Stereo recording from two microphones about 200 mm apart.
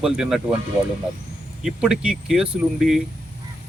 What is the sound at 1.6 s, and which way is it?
Speech, 5° right (ahead or behind).